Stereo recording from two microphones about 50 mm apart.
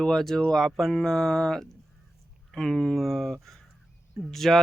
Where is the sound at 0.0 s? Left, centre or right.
Centre.